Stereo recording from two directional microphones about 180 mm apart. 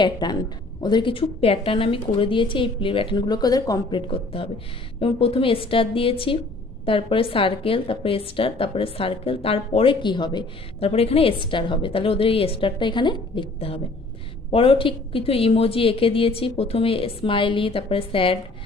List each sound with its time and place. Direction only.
0.0 s a woman's voice: 25° left (ahead or behind)
4.1 s a woman's voice: 30° left (ahead or behind)